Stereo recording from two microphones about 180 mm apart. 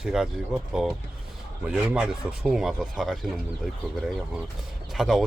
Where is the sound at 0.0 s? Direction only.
5° right (ahead or behind).